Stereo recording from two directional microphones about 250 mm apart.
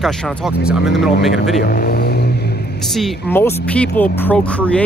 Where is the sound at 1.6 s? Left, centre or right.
Left.